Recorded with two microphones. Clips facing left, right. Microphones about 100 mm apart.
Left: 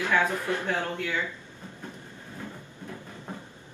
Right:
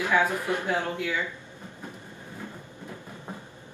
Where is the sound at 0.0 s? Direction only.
15° right (ahead or behind).